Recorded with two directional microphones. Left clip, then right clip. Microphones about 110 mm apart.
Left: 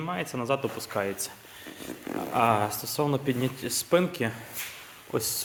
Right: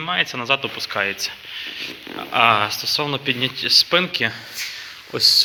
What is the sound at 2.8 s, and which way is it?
Speech, 35° left (ahead or behind).